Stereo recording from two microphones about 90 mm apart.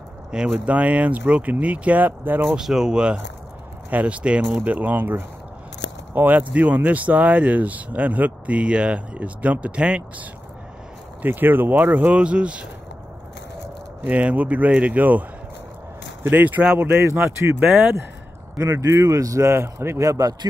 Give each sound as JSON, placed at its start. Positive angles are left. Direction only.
{"t": 0.3, "sound": "speech", "side_deg": -10}
{"t": 2.5, "sound": "speech", "side_deg": -5}
{"t": 11.2, "sound": "speech", "side_deg": -20}
{"t": 14.0, "sound": "speech", "side_deg": -15}
{"t": 16.3, "sound": "speech", "side_deg": -20}
{"t": 16.9, "sound": "speech", "side_deg": -30}
{"t": 17.6, "sound": "speech", "side_deg": -20}
{"t": 18.6, "sound": "speech", "side_deg": -35}